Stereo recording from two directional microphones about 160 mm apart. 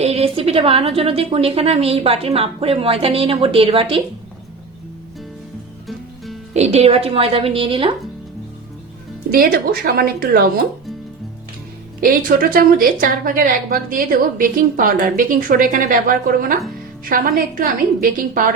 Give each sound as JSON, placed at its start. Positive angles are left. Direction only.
{"t": 0.0, "sound": "a woman's voice", "side_deg": -40}
{"t": 6.5, "sound": "a woman's voice", "side_deg": -45}
{"t": 9.3, "sound": "a woman's voice", "side_deg": -75}
{"t": 11.9, "sound": "a woman's voice", "side_deg": -65}